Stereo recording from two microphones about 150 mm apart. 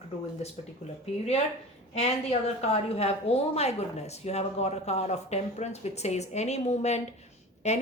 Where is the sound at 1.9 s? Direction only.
45° left (ahead or behind).